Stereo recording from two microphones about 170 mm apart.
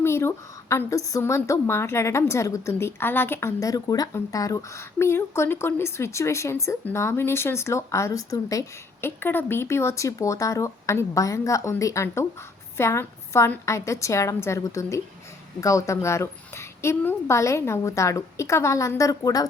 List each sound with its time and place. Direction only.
0.0 s a woman's voice: 15° left (ahead or behind)